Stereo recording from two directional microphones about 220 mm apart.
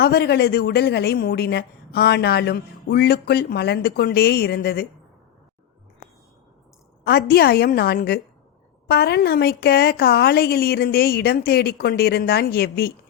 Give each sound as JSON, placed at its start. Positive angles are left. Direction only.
{"t": 0.0, "sound": "a woman's voice", "side_deg": 45}
{"t": 7.0, "sound": "a woman's voice", "side_deg": 45}